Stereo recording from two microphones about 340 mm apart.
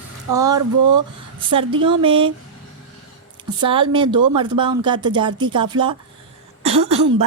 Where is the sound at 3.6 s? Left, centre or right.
Centre.